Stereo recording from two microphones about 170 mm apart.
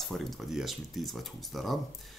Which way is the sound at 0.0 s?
Centre (ahead or behind).